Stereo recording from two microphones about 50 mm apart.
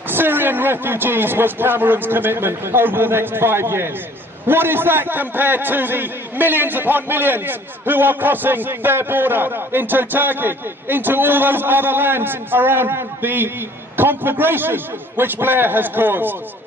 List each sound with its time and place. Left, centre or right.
0.1 s a man's voice: right